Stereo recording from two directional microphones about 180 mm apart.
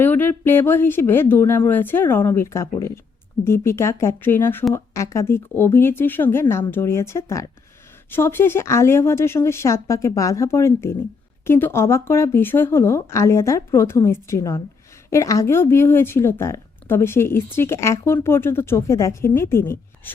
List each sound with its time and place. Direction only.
0.0 s a woman's voice: 10° left (ahead or behind)